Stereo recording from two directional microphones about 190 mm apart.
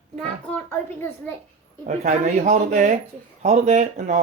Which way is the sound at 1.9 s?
40° right (ahead or behind).